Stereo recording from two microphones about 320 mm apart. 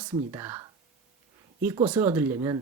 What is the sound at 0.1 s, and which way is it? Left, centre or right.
Speech, centre.